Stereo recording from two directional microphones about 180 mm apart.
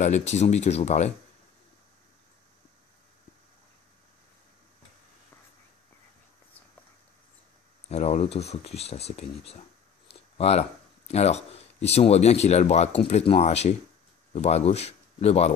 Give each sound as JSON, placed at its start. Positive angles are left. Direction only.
{"t": 0.0, "sound": "speech", "side_deg": 40}
{"t": 7.9, "sound": "speech", "side_deg": 40}